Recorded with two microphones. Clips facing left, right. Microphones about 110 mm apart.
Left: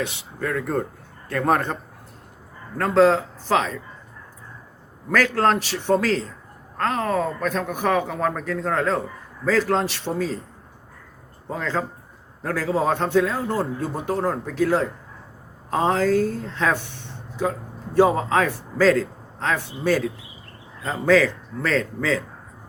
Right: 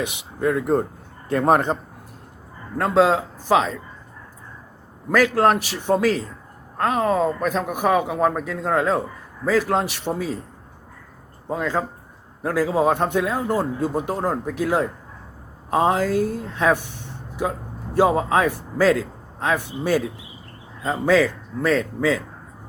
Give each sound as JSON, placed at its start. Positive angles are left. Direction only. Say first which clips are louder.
{"t": 0.0, "sound": "a man's voice", "louder": "right 4 dB", "side_deg": -15}
{"t": 5.1, "sound": "speech", "louder": "right 2 dB", "side_deg": -15}
{"t": 11.4, "sound": "speech", "louder": "right 2 dB", "side_deg": -10}